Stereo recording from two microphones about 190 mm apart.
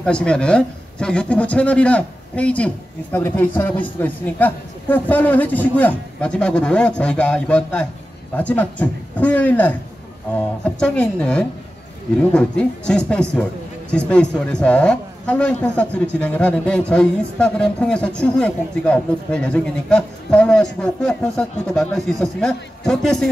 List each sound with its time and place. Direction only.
0.0 s a man's voice: 5° left (ahead or behind)